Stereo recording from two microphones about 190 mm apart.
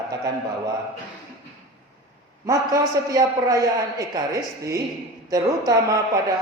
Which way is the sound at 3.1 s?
20° right (ahead or behind).